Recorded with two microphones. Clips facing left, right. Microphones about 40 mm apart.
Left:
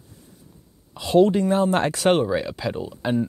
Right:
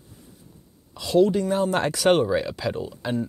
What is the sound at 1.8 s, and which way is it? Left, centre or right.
Speech, centre.